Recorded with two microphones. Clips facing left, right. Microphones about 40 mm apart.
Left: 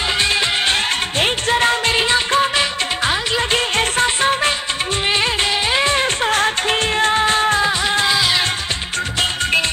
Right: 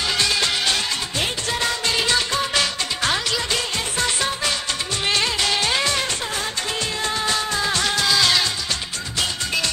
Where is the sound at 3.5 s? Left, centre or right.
Left.